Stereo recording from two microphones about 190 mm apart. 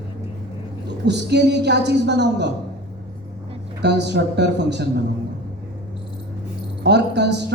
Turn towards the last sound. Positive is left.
turn(degrees=-65)  # may be behind; listen again after turning